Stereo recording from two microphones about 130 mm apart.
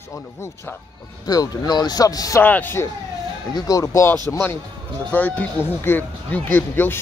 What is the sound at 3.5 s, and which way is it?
Speech, 25° left (ahead or behind).